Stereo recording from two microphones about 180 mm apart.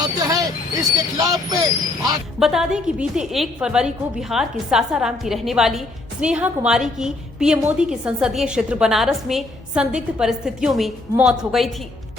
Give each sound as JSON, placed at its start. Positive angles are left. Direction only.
{"t": 0.0, "sound": "speech", "side_deg": -20}
{"t": 2.4, "sound": "a woman's voice", "side_deg": 0}